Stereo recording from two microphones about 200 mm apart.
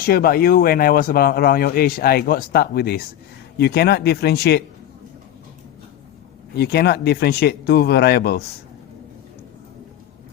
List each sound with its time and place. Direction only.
0.0 s speech: 50° left (ahead or behind)
6.6 s speech: 55° left (ahead or behind)